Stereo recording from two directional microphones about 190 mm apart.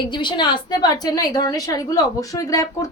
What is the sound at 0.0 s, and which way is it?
A woman's voice, 25° left (ahead or behind).